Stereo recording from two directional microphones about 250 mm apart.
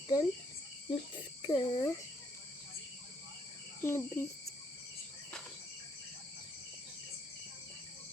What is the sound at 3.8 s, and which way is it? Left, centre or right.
Speech, centre.